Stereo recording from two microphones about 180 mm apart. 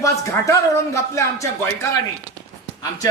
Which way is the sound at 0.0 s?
15° left (ahead or behind).